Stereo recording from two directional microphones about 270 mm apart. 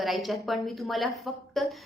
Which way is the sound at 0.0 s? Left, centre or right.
Centre.